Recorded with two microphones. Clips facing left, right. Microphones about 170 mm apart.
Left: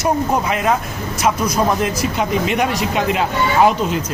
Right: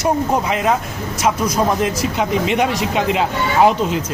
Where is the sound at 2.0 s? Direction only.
25° right (ahead or behind).